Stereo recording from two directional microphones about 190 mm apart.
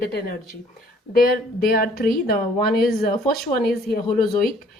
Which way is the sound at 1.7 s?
50° left (ahead or behind).